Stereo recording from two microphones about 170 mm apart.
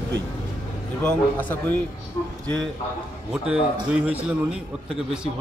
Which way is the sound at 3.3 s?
5° right (ahead or behind).